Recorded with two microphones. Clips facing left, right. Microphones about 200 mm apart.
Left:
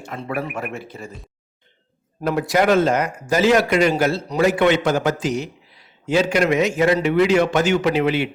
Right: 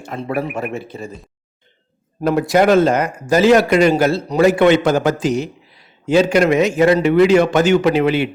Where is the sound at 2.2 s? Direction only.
35° right (ahead or behind).